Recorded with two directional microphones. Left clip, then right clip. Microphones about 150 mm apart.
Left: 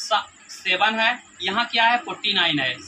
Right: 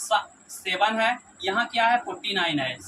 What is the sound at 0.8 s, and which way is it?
Speech, 15° right (ahead or behind).